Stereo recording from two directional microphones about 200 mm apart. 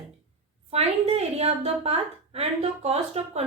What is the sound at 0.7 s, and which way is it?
A woman's voice, 30° right (ahead or behind).